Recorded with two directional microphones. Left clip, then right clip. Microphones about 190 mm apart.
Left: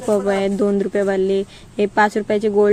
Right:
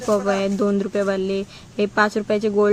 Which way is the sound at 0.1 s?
20° left (ahead or behind).